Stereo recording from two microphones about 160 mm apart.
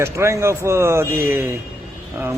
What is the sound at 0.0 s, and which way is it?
A man's voice, 15° right (ahead or behind).